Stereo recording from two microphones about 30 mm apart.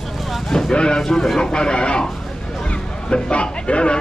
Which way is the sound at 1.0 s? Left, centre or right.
Left.